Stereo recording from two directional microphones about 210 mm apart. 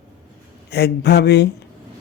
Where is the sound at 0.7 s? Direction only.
50° left (ahead or behind).